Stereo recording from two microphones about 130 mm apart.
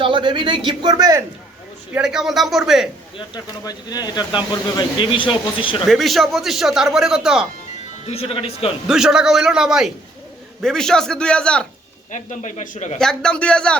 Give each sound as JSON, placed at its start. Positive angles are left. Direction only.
{"t": 0.0, "sound": "speech", "side_deg": -40}
{"t": 1.9, "sound": "speech", "side_deg": -5}
{"t": 3.2, "sound": "speech", "side_deg": 30}
{"t": 5.8, "sound": "speech", "side_deg": 0}
{"t": 8.0, "sound": "speech", "side_deg": 50}
{"t": 8.9, "sound": "speech", "side_deg": -5}
{"t": 12.1, "sound": "speech", "side_deg": 75}
{"t": 13.0, "sound": "a man's voice", "side_deg": 5}